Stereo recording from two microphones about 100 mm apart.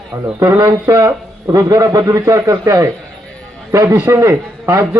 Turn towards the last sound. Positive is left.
turn(degrees=-30)  # may be behind; listen again after turning